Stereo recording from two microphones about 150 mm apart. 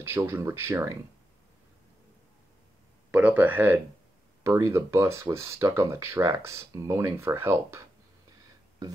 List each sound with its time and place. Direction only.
0.0 s speech: 15° right (ahead or behind)
3.1 s speech: 10° right (ahead or behind)